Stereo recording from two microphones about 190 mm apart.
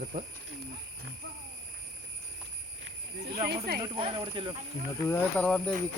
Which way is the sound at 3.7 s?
55° right (ahead or behind).